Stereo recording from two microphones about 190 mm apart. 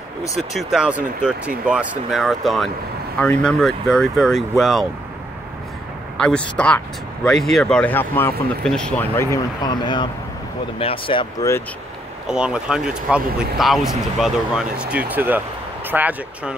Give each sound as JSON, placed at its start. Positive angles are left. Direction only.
{"t": 0.4, "sound": "speech", "side_deg": 0}
{"t": 6.1, "sound": "speech", "side_deg": 5}
{"t": 12.3, "sound": "speech", "side_deg": -5}